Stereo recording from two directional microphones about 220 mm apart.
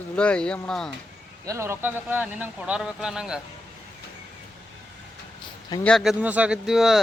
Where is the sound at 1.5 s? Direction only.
10° right (ahead or behind).